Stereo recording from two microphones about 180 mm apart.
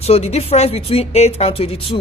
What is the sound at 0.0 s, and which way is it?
Speech, 35° left (ahead or behind).